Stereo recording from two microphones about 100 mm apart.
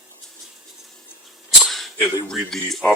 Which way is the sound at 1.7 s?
Centre (ahead or behind).